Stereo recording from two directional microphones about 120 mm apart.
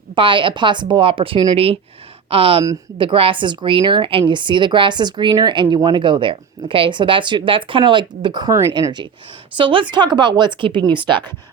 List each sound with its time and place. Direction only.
0.2 s a woman's voice: 45° right (ahead or behind)